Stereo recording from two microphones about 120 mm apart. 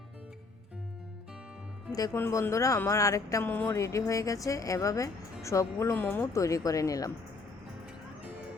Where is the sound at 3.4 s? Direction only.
15° left (ahead or behind).